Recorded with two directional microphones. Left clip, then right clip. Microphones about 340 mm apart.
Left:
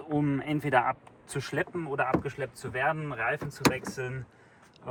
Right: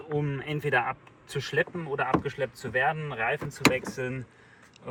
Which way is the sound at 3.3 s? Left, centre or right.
Centre.